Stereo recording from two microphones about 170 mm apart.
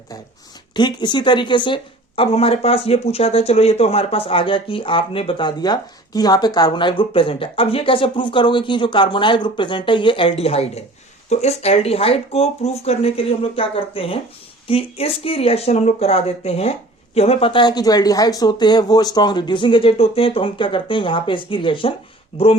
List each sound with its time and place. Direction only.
0.7 s speech: 25° left (ahead or behind)